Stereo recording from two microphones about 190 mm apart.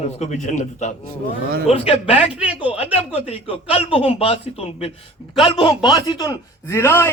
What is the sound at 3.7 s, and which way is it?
A man's voice, 30° left (ahead or behind).